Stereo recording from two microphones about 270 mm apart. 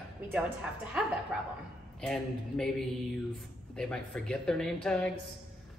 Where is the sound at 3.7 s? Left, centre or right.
Centre.